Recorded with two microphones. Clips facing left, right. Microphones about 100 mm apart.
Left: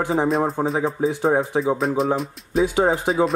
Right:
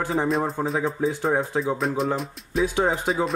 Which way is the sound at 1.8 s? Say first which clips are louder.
Left 4 dB; centre (ahead or behind).